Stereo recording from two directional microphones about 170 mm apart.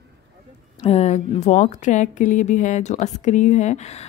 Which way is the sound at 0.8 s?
40° left (ahead or behind).